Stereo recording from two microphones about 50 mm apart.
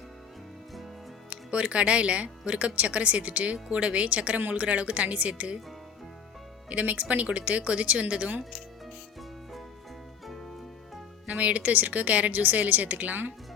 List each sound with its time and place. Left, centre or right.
1.3 s speech: right
6.7 s speech: right
11.3 s a woman's voice: right